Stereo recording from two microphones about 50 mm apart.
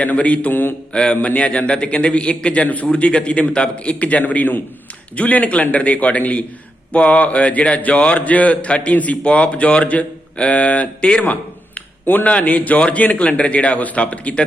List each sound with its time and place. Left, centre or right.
0.0 s a man's voice: left
1.4 s a man's voice: left